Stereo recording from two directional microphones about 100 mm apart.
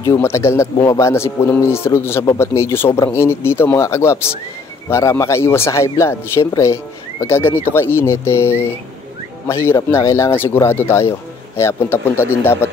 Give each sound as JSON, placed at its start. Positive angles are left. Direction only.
{"t": 0.2, "sound": "speech", "side_deg": 30}